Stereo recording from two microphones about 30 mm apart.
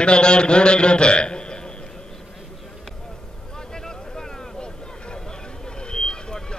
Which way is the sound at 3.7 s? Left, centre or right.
Centre.